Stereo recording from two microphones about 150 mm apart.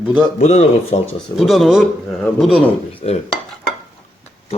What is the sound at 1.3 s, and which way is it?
A man's voice, centre (ahead or behind).